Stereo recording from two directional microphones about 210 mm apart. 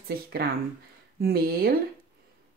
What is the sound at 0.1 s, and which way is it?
Speech, 45° right (ahead or behind).